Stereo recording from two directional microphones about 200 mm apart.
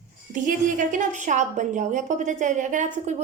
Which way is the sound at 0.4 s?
40° right (ahead or behind).